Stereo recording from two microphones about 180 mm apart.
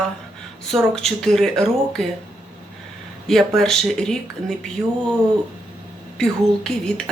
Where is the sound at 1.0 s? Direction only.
Centre (ahead or behind).